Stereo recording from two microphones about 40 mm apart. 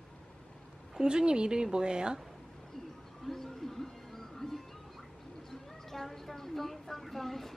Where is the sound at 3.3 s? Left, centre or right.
Centre.